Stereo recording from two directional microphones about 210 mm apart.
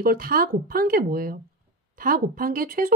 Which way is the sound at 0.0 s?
45° right (ahead or behind).